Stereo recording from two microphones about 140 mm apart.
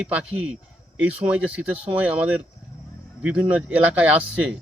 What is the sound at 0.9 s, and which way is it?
Speech, 10° right (ahead or behind).